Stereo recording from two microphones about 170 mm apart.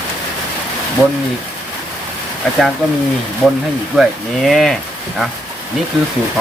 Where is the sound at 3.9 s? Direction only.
Centre (ahead or behind).